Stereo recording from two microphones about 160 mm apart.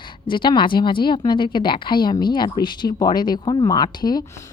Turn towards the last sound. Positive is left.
turn(degrees=25)  # may be behind; listen again after turning